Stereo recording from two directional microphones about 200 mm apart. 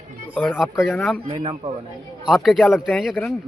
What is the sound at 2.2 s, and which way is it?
Speech, centre (ahead or behind).